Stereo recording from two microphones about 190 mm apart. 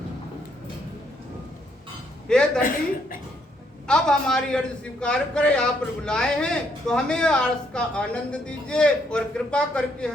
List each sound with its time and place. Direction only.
2.2 s speech: 5° left (ahead or behind)
2.6 s a woman's voice: 45° left (ahead or behind)
3.8 s a man's voice: 5° left (ahead or behind)